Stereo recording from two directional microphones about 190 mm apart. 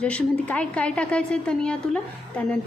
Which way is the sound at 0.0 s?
5° left (ahead or behind).